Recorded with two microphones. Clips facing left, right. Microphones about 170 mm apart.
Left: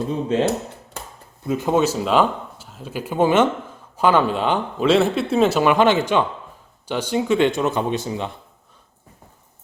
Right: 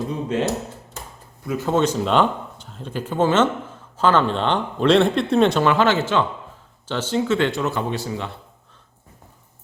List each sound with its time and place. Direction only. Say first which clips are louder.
0.1 s speech: left 5 dB; 30° left (ahead or behind)
1.5 s speech: left 1 dB; 15° left (ahead or behind)